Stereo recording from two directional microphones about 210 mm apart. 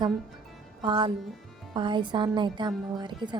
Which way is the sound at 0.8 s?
25° right (ahead or behind).